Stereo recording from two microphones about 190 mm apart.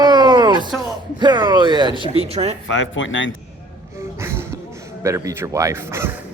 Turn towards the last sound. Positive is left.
turn(degrees=-15)  # may be behind; listen again after turning